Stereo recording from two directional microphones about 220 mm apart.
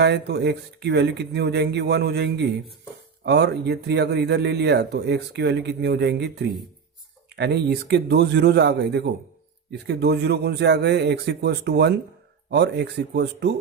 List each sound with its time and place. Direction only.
0.0 s speech: 50° right (ahead or behind)